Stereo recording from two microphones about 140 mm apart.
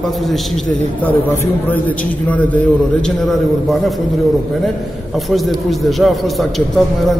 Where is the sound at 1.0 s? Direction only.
10° left (ahead or behind).